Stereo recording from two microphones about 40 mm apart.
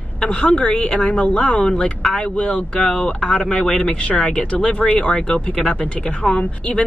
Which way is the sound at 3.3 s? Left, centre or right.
Left.